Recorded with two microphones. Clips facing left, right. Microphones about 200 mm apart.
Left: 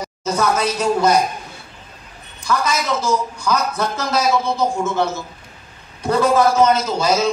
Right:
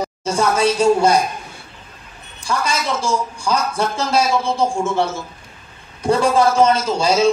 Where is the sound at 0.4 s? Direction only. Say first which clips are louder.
Right 4 dB; 30° right (ahead or behind).